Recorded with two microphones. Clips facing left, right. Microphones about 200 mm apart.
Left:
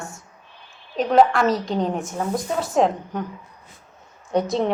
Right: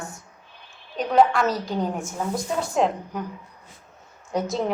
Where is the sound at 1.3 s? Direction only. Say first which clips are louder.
Left 3 dB; centre (ahead or behind).